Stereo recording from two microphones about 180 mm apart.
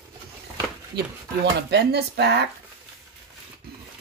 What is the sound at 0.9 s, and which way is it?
Speech, 65° right (ahead or behind).